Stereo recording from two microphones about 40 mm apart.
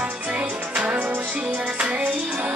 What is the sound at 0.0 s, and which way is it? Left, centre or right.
Music, right.